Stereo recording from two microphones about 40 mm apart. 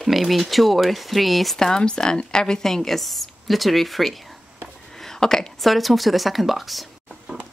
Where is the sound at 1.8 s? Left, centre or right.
Left; by 4.1 s centre.